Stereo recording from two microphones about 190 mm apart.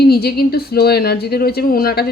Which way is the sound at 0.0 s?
55° left (ahead or behind).